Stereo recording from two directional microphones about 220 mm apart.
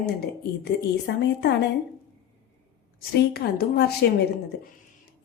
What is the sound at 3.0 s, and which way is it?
A woman's voice, 45° left (ahead or behind).